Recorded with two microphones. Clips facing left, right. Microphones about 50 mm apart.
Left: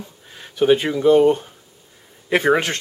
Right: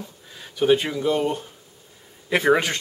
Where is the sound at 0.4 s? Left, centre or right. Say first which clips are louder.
Left 3 dB; centre.